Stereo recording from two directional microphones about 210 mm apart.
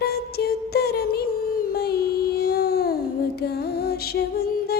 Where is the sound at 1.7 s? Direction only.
50° left (ahead or behind).